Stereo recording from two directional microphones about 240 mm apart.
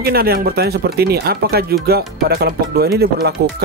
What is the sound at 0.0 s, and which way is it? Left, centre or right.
Speech, right.